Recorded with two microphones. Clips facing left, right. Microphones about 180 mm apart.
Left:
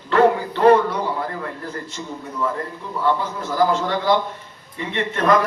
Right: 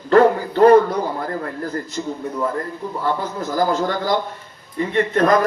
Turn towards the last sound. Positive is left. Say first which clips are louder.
# right 3 dB
turn(degrees=-40)  # may be behind; listen again after turning